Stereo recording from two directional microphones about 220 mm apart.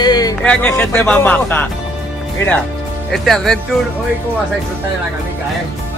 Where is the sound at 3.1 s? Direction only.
Centre (ahead or behind).